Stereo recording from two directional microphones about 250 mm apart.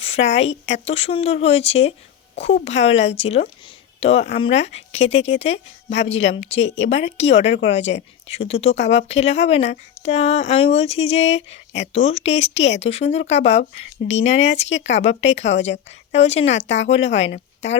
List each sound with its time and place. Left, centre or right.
0.0 s speech: left